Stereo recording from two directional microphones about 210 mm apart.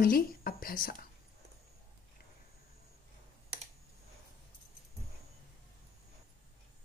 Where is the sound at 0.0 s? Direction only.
45° left (ahead or behind).